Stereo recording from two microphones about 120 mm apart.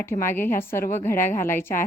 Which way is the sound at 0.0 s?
20° left (ahead or behind).